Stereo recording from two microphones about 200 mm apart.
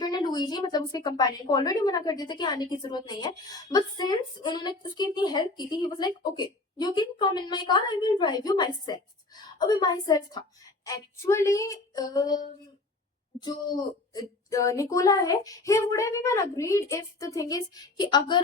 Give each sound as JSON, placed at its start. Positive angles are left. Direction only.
{"t": 0.0, "sound": "a woman's voice", "side_deg": 20}